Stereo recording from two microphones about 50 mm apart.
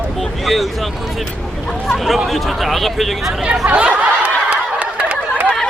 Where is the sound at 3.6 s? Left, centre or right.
Right.